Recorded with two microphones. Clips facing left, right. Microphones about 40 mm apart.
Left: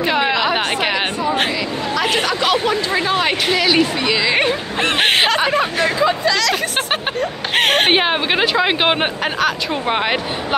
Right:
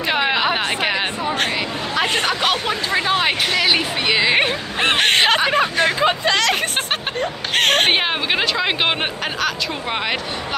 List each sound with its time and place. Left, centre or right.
0.3 s a sound: centre
2.6 s speech: right
4.0 s speech: right
4.9 s speech: centre
5.9 s speech: right
7.5 s speech: centre